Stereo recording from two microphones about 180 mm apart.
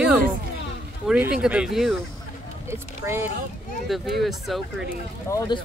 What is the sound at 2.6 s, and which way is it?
Speech, 15° right (ahead or behind).